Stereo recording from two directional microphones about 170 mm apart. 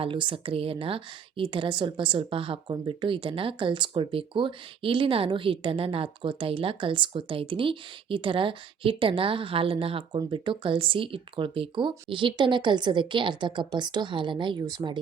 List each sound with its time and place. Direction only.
0.0 s a woman's voice: 30° right (ahead or behind)